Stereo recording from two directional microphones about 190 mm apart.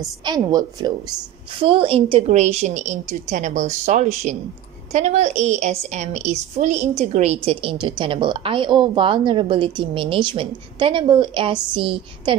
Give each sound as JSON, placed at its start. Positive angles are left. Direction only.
{"t": 0.2, "sound": "a woman's voice", "side_deg": -20}